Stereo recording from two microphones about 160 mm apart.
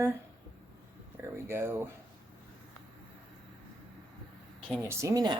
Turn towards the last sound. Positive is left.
turn(degrees=-20)  # may be behind; listen again after turning